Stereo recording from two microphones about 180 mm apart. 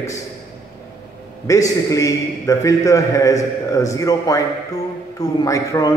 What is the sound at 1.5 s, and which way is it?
A man's voice, 20° left (ahead or behind).